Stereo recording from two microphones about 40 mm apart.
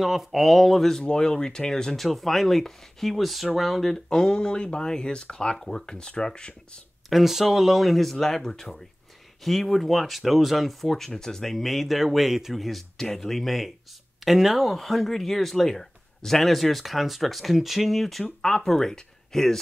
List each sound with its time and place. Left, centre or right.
0.0 s a man's voice: centre
0.9 s speech: centre
2.0 s a man's voice: centre
3.9 s speech: centre
7.1 s a man's voice: centre
14.7 s a man's voice: centre
18.2 s speech: centre